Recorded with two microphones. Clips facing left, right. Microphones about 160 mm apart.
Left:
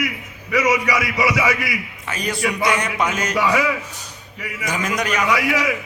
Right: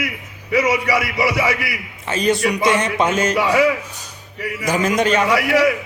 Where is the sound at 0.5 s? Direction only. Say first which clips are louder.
Right 1 dB; 30° right (ahead or behind).